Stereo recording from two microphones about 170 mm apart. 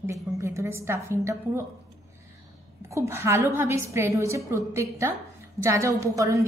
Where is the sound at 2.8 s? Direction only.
15° right (ahead or behind).